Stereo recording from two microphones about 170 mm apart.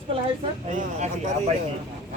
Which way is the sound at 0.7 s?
45° right (ahead or behind).